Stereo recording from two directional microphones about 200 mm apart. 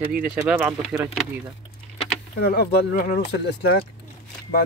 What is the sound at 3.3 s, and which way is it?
Speech, 55° left (ahead or behind).